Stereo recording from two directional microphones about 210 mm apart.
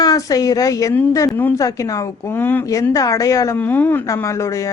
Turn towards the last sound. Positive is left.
turn(degrees=15)  # may be behind; listen again after turning